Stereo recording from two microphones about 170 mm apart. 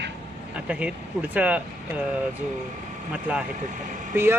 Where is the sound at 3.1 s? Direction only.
5° right (ahead or behind).